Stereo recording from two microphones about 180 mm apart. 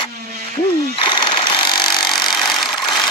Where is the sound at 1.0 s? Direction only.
25° left (ahead or behind).